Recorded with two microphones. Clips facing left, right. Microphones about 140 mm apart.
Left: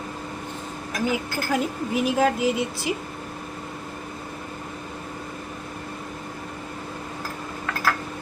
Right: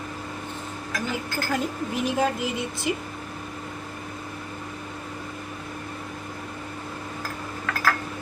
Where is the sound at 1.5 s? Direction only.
5° left (ahead or behind).